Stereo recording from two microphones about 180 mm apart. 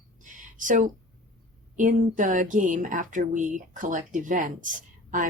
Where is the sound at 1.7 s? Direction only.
45° right (ahead or behind).